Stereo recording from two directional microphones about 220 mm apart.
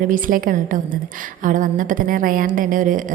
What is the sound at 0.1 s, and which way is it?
A woman's voice, 40° right (ahead or behind).